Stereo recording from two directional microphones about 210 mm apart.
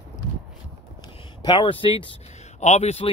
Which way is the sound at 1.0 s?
20° left (ahead or behind).